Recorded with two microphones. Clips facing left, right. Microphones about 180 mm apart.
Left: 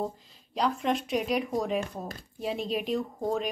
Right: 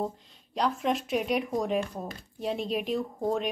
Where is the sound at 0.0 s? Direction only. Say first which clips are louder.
Right 1 dB; centre (ahead or behind).